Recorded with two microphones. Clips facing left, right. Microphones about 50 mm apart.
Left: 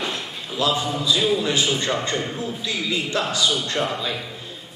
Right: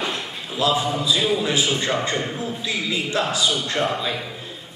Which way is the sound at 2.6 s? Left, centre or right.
Right.